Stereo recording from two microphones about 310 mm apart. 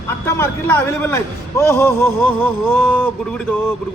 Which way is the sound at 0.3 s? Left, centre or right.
Centre.